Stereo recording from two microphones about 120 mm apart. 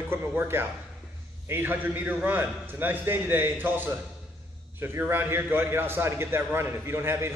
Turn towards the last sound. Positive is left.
turn(degrees=-20)  # may be behind; listen again after turning